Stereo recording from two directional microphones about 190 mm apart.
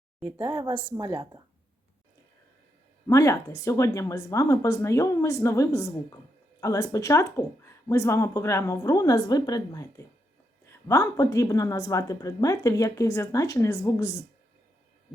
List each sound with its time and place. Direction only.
0.2 s a woman's voice: 10° right (ahead or behind)
3.1 s a woman's voice: 15° left (ahead or behind)